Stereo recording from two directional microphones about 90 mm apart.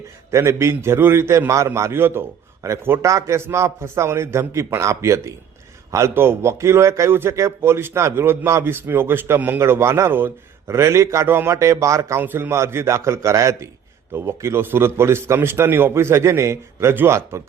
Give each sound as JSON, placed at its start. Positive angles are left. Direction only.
{"t": 0.3, "sound": "a man's voice", "side_deg": -30}
{"t": 10.7, "sound": "a man's voice", "side_deg": -35}
{"t": 12.2, "sound": "a man's voice", "side_deg": -25}